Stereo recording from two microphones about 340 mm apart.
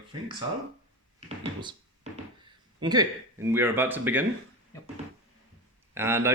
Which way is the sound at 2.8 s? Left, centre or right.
Centre.